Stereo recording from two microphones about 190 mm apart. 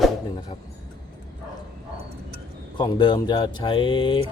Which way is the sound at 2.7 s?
25° left (ahead or behind).